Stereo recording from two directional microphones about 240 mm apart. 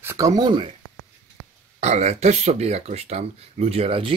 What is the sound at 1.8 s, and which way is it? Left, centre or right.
Speech, right.